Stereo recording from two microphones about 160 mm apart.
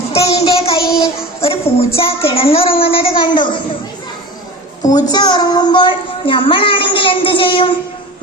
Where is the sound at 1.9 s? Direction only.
35° left (ahead or behind).